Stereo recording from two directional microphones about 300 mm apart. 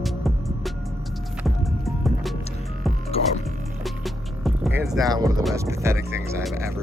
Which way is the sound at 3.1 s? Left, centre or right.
Centre.